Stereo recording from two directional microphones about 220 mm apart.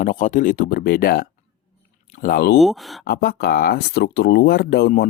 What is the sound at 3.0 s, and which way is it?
Speech, 45° left (ahead or behind).